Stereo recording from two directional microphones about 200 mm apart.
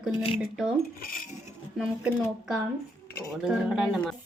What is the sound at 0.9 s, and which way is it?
Cutlery, 45° left (ahead or behind).